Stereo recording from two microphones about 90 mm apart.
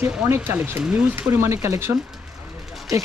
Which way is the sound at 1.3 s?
30° right (ahead or behind).